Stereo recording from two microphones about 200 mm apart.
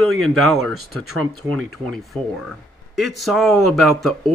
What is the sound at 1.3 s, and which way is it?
Speech, 90° right.